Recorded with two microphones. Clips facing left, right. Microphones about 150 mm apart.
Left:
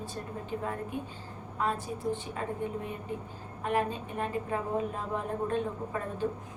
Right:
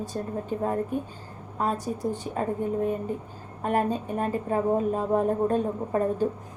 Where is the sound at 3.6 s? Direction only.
40° right (ahead or behind).